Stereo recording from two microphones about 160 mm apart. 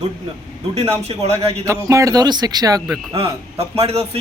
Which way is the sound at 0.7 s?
40° right (ahead or behind).